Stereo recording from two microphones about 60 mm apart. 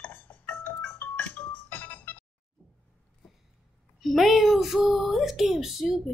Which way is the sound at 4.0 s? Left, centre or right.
Centre.